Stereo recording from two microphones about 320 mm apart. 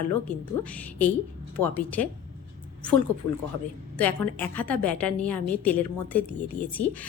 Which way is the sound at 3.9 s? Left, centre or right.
Centre.